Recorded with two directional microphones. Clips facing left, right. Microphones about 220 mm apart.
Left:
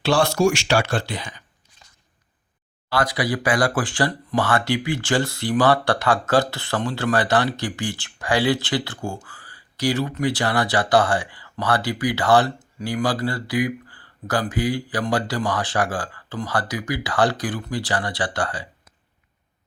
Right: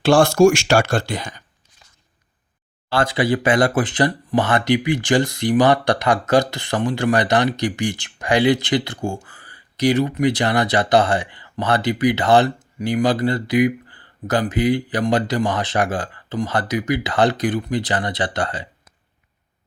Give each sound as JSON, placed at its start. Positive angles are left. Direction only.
{"t": 0.0, "sound": "speech", "side_deg": -50}
{"t": 2.9, "sound": "speech", "side_deg": -25}